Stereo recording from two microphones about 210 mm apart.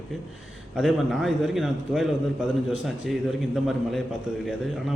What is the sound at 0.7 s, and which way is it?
A man's voice, centre (ahead or behind).